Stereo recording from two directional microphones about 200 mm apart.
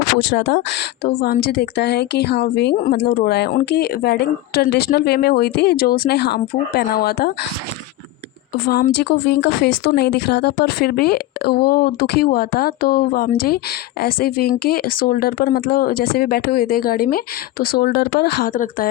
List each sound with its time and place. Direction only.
0.0 s a woman's voice: 75° left (ahead or behind); by 7.3 s 50° left (ahead or behind)
8.5 s a woman's voice: 50° left (ahead or behind)